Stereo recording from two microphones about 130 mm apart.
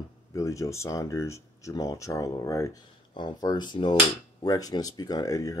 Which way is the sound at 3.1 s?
35° left (ahead or behind).